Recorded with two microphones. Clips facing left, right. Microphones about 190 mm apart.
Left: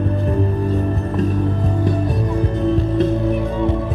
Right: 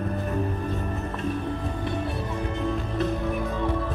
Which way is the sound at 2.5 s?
35° left (ahead or behind).